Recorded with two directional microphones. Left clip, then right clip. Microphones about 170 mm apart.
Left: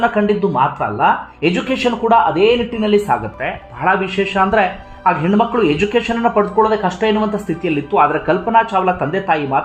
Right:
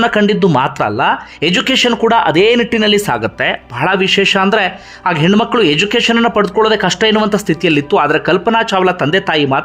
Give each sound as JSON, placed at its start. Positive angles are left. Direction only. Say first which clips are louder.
{"t": 0.0, "sound": "speech", "louder": "right 3 dB", "side_deg": -35}